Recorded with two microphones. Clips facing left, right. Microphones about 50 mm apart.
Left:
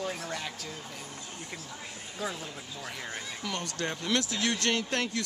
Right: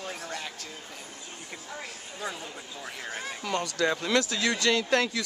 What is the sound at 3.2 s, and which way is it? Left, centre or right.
Speech, right.